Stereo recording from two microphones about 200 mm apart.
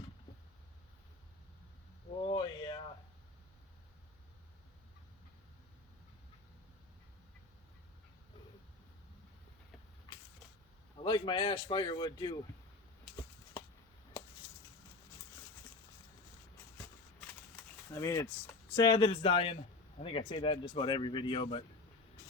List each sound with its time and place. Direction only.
2.2 s a sound: 25° left (ahead or behind)
10.9 s speech: 25° left (ahead or behind)
17.9 s speech: 15° left (ahead or behind)